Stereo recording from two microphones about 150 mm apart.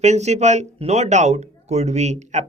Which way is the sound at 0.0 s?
50° right (ahead or behind).